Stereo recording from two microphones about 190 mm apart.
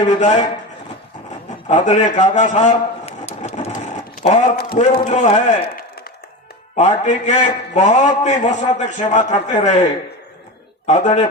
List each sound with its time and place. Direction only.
0.1 s a man's voice: 40° left (ahead or behind)
1.6 s a man's voice: 35° left (ahead or behind)
6.7 s a man's voice: 35° left (ahead or behind)
10.8 s a man's voice: 40° left (ahead or behind)